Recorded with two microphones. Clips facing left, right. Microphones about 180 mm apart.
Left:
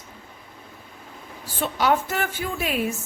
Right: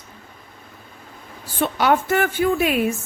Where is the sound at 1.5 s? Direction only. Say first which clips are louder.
Right 3 dB; 60° right (ahead or behind).